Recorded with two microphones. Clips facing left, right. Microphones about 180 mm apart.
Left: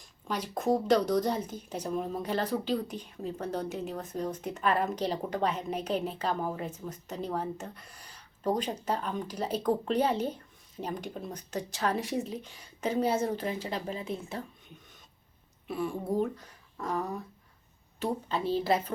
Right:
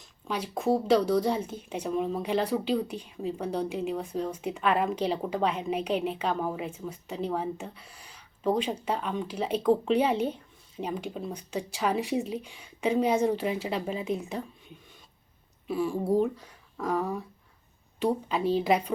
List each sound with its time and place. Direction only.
0.3 s speech: 10° right (ahead or behind)
1.4 s speech: 30° right (ahead or behind)
1.7 s speech: 10° right (ahead or behind)
15.6 s speech: centre (ahead or behind)